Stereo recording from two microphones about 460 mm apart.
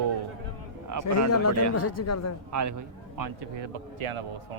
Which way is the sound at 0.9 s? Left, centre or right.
Right.